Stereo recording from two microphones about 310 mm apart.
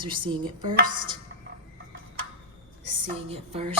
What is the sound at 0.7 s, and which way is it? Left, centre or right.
Speech, right.